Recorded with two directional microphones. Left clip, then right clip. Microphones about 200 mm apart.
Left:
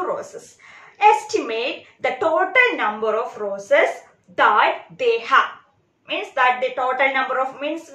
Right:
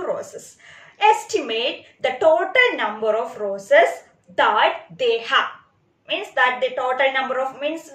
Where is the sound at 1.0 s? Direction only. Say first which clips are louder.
Left 2 dB; 5° left (ahead or behind).